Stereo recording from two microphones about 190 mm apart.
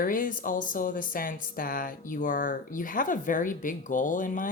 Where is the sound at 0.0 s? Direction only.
45° left (ahead or behind).